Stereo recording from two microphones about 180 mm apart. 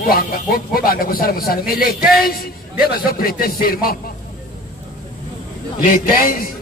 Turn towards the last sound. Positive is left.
turn(degrees=50)  # may be behind; listen again after turning